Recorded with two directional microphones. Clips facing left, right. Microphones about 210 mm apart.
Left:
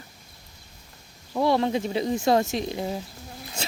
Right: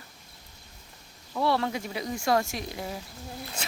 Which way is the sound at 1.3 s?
20° left (ahead or behind).